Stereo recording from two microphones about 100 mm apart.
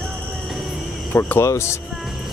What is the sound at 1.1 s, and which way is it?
Speech, 25° left (ahead or behind).